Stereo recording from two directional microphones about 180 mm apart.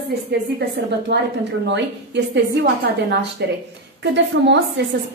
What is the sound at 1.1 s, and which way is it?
A woman's voice, 75° right (ahead or behind).